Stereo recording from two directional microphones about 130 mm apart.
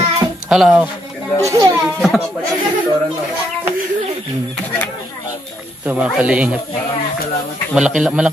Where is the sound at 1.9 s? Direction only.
Centre (ahead or behind).